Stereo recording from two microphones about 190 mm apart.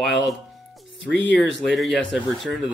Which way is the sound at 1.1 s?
70° left (ahead or behind).